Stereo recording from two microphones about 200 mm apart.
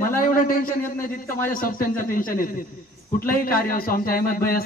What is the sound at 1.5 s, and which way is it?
A man's voice, 45° left (ahead or behind).